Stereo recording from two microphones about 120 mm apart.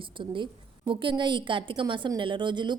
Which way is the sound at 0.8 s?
40° right (ahead or behind).